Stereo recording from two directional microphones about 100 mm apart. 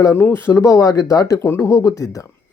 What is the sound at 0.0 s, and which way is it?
Speech, 25° left (ahead or behind).